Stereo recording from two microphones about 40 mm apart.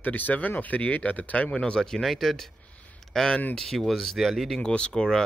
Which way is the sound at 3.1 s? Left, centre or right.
Centre.